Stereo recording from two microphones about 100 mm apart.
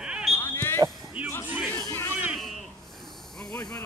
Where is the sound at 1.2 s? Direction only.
15° right (ahead or behind).